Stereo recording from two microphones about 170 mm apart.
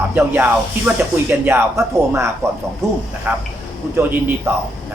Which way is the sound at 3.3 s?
10° right (ahead or behind).